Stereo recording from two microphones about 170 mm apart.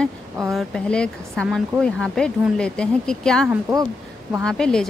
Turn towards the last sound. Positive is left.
turn(degrees=5)  # may be behind; listen again after turning